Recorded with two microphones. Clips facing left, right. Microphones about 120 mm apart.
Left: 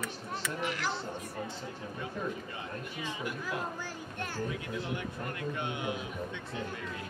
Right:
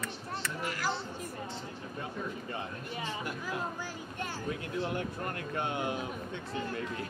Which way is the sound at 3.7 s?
15° right (ahead or behind).